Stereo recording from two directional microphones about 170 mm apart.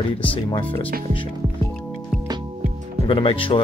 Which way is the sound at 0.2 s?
30° left (ahead or behind).